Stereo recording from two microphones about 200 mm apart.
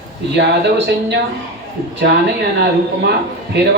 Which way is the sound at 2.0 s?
55° right (ahead or behind).